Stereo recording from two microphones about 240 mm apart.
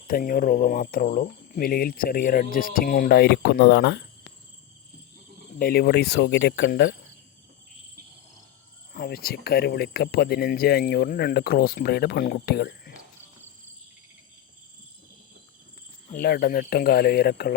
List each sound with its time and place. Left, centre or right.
0.1 s speech: left
5.5 s speech: left
8.9 s speech: left
16.1 s speech: left